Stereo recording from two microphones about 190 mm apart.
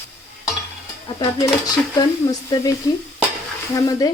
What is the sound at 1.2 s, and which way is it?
Speech, 20° left (ahead or behind).